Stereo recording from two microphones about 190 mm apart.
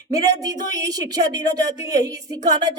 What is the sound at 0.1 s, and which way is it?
A woman's voice, 20° right (ahead or behind).